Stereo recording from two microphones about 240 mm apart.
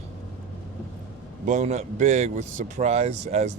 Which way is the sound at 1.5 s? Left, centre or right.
Right.